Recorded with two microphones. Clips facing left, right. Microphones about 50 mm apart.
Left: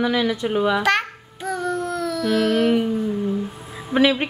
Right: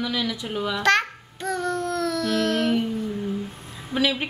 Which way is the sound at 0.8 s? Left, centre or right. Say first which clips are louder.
Even; centre.